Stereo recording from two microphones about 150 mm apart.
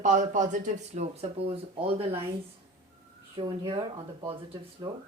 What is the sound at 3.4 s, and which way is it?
Speech, 35° right (ahead or behind).